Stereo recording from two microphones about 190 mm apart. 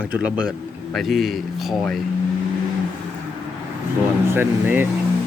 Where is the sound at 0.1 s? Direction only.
5° right (ahead or behind).